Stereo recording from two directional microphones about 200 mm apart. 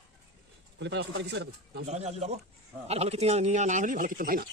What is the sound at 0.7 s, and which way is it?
Speech, 60° right (ahead or behind).